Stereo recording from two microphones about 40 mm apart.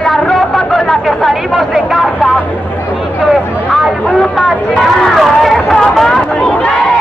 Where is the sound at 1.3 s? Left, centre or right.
Centre.